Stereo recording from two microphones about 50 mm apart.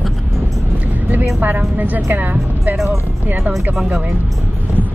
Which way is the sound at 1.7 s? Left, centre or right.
Right.